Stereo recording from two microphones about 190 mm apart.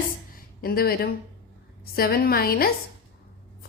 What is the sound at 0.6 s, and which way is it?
Speech, 50° left (ahead or behind).